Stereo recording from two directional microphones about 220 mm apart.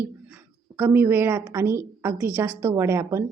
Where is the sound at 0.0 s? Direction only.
10° right (ahead or behind).